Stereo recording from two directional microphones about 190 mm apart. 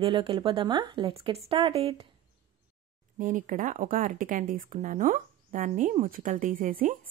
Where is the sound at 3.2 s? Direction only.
45° right (ahead or behind).